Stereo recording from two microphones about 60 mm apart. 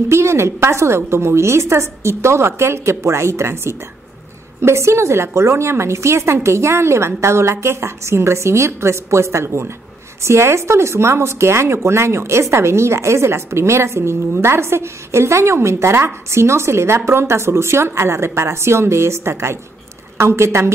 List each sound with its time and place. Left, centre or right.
0.1 s speech: right